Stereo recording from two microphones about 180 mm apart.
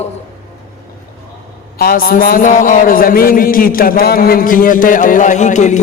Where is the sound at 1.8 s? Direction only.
55° left (ahead or behind).